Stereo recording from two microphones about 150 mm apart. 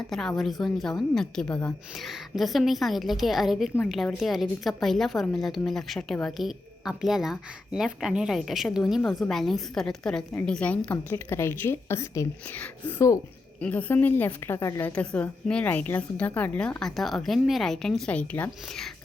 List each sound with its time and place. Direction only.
0.1 s a woman's voice: centre (ahead or behind)